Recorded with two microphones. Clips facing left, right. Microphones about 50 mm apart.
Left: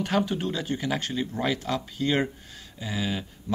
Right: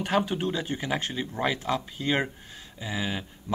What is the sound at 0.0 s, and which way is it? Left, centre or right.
Speech, centre.